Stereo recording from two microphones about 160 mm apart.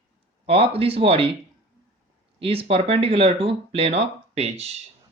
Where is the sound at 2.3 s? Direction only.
35° right (ahead or behind).